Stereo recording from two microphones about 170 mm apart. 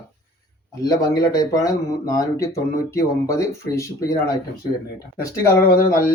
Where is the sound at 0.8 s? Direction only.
20° left (ahead or behind).